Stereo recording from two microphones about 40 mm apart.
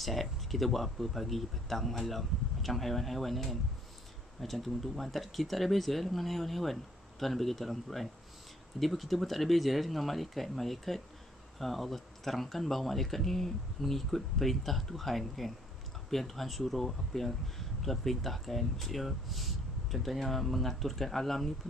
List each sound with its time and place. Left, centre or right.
0.0 s speech: centre